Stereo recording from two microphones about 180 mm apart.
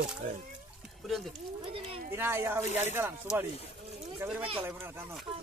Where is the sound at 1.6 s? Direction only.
30° right (ahead or behind).